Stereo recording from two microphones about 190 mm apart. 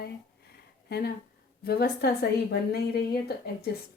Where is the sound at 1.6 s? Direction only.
55° left (ahead or behind).